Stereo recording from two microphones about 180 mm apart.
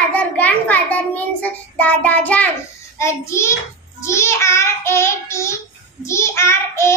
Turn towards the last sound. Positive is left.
turn(degrees=15)  # may be behind; listen again after turning